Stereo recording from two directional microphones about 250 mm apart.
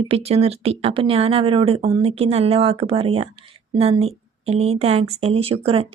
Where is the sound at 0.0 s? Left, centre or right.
Right.